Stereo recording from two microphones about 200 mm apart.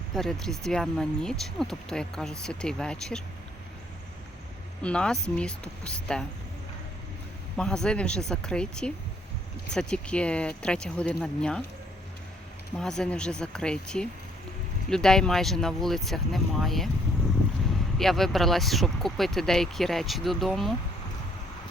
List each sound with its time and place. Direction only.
0.1 s speech: centre (ahead or behind)
4.8 s speech: 5° left (ahead or behind)
7.5 s speech: 5° left (ahead or behind)
12.8 s speech: 5° left (ahead or behind)